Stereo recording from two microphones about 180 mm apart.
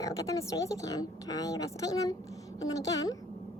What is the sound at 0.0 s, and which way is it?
A woman's voice, 20° left (ahead or behind).